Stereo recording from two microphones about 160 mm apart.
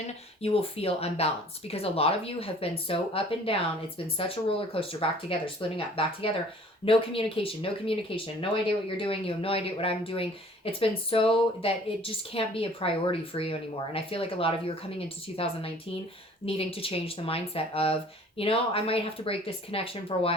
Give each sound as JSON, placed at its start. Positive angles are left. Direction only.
{"t": 0.4, "sound": "speech", "side_deg": 40}